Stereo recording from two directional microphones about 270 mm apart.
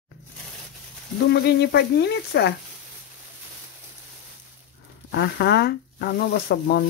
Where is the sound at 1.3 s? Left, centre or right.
Left.